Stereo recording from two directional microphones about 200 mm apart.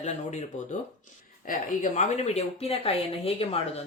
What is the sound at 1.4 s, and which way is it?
A woman's voice, 40° left (ahead or behind).